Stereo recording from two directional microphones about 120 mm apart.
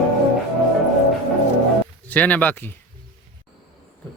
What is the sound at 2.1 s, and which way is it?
Speech, 15° left (ahead or behind).